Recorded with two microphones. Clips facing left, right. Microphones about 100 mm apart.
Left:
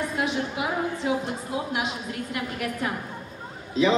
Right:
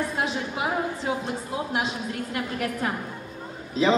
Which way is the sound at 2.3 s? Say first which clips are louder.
Right 1 dB; 30° right (ahead or behind).